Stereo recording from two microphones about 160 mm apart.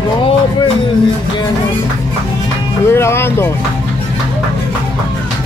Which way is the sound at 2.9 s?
15° left (ahead or behind).